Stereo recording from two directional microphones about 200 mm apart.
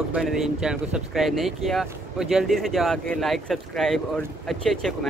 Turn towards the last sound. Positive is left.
turn(degrees=0)  # may be behind; listen again after turning